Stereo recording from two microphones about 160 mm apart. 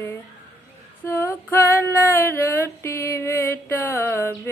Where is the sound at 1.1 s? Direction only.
15° left (ahead or behind).